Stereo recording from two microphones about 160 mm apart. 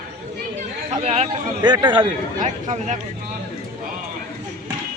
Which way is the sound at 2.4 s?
50° right (ahead or behind).